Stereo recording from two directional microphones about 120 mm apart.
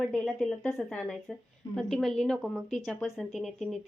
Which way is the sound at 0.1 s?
5° left (ahead or behind).